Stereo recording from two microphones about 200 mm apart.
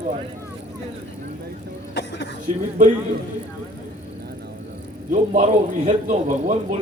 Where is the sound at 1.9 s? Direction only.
60° left (ahead or behind).